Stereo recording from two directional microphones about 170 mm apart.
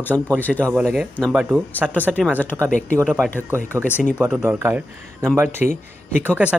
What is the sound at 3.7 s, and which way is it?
Speech, 10° right (ahead or behind).